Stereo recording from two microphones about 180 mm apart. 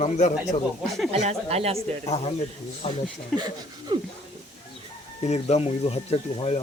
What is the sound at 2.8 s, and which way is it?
Speech, 35° left (ahead or behind).